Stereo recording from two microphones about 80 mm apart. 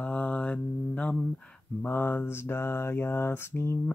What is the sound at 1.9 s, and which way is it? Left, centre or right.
Mantra, left.